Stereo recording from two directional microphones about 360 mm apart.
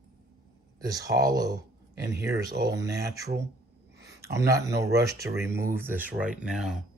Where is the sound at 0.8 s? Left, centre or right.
Centre.